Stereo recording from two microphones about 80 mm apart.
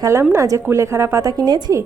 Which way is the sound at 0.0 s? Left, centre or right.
Right.